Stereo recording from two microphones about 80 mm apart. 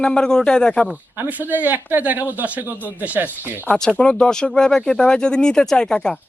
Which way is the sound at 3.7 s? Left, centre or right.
Centre.